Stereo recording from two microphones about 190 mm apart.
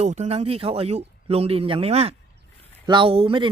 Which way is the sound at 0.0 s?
35° right (ahead or behind).